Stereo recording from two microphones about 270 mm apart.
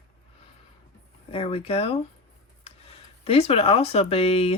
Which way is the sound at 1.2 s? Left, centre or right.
Left.